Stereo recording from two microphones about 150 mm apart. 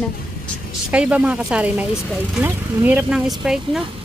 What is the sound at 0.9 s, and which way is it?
A woman's voice, 10° right (ahead or behind).